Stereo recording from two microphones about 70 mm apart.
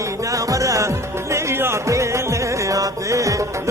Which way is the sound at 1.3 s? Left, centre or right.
Right.